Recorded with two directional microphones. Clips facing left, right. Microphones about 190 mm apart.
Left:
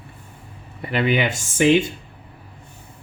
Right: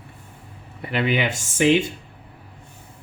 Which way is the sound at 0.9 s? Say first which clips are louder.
Left 2 dB; 45° left (ahead or behind).